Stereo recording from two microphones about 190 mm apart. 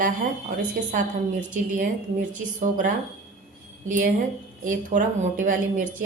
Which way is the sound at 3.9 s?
45° right (ahead or behind).